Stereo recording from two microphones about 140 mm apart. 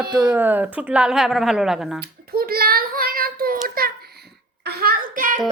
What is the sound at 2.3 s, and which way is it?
Child singing, 90° right.